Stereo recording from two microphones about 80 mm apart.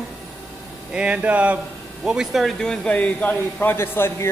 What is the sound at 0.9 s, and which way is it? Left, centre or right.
Speech, centre.